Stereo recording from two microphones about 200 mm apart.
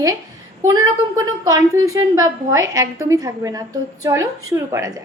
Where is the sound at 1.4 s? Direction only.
20° right (ahead or behind).